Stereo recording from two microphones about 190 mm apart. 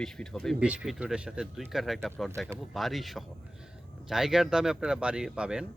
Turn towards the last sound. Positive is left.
turn(degrees=-5)  # may be behind; listen again after turning